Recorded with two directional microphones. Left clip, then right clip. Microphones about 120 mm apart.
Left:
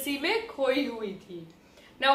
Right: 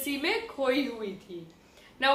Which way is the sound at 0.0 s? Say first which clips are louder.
Left 1 dB; 25° right (ahead or behind).